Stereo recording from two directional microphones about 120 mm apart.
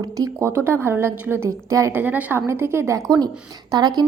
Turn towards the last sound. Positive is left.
turn(degrees=-35)  # may be behind; listen again after turning